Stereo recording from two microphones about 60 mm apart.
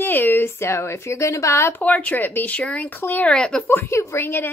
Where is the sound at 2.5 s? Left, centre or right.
Left.